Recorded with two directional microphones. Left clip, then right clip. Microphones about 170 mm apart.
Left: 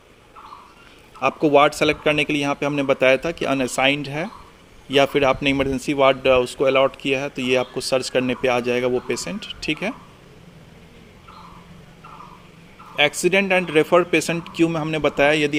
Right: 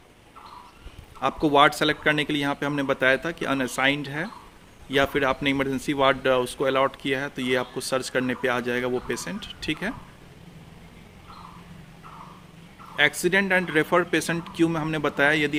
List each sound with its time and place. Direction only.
1.2 s speech: 10° left (ahead or behind)
13.0 s speech: 15° left (ahead or behind)